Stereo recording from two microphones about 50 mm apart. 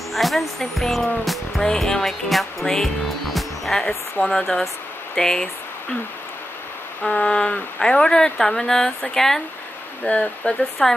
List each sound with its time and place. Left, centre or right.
0.1 s speech: centre
1.6 s speech: centre
7.1 s a woman's voice: centre